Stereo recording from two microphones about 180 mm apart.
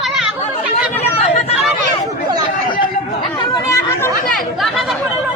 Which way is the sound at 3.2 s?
25° left (ahead or behind).